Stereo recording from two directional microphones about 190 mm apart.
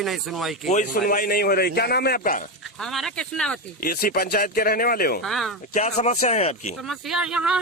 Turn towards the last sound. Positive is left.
turn(degrees=-5)  # may be behind; listen again after turning